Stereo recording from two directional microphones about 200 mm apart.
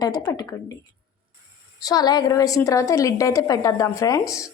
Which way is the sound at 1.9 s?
20° left (ahead or behind).